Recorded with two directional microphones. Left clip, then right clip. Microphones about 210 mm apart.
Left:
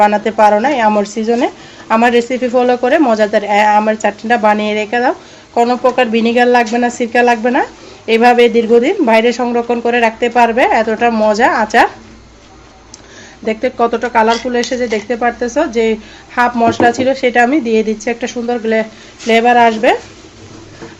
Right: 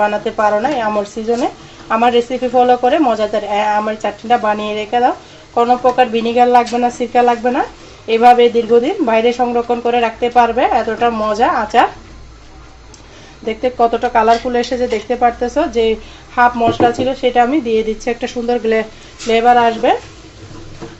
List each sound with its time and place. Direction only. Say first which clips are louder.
0.0 s speech: left 5 dB; 25° left (ahead or behind)
13.4 s speech: even; 20° left (ahead or behind)
18.4 s speech: even; centre (ahead or behind)
19.3 s speech: left 2 dB; 25° left (ahead or behind)